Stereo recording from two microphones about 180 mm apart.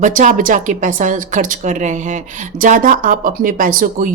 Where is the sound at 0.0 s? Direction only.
45° right (ahead or behind).